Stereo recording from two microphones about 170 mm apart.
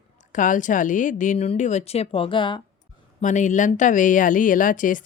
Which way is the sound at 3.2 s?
45° left (ahead or behind).